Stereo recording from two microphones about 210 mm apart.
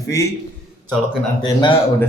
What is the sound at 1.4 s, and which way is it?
Speech, 15° left (ahead or behind).